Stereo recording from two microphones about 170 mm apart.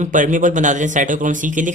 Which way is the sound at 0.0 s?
50° right (ahead or behind).